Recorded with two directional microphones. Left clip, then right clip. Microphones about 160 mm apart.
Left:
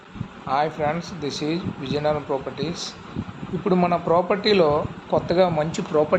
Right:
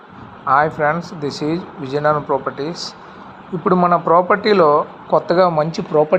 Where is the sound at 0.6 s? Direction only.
5° right (ahead or behind).